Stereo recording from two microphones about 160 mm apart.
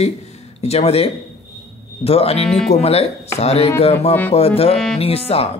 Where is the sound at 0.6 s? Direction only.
40° left (ahead or behind).